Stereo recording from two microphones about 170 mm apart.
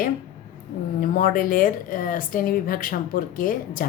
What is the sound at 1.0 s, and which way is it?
A woman's voice, 55° left (ahead or behind).